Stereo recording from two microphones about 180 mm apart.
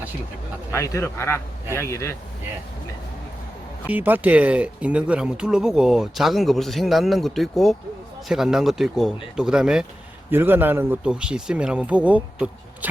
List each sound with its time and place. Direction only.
0.7 s a man's voice: 15° left (ahead or behind)
3.8 s a man's voice: 10° right (ahead or behind)